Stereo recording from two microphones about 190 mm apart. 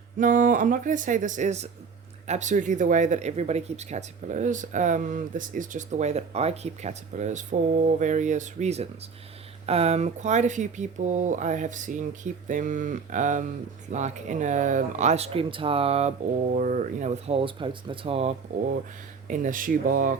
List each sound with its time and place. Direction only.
0.2 s speech: 45° right (ahead or behind)
19.3 s speech: 45° right (ahead or behind)